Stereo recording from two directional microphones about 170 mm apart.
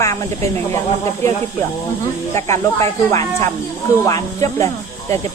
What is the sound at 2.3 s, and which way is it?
Speech, 15° left (ahead or behind).